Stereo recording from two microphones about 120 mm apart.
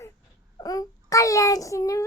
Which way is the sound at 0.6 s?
30° left (ahead or behind).